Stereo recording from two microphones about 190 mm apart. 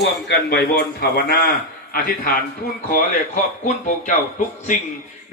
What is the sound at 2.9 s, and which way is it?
Speech, 40° left (ahead or behind).